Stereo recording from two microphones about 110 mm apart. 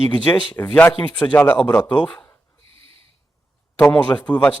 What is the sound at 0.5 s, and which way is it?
Speech, 15° left (ahead or behind).